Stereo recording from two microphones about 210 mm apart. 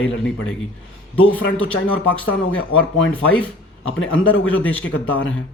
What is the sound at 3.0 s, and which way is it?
Speech, 5° left (ahead or behind).